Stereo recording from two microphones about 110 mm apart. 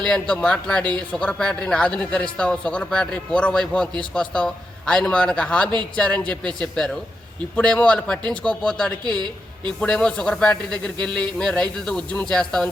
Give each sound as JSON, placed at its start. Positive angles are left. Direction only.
{"t": 0.1, "sound": "a man's voice", "side_deg": 10}
{"t": 9.0, "sound": "a woman's voice", "side_deg": -40}
{"t": 9.6, "sound": "a man's voice", "side_deg": 10}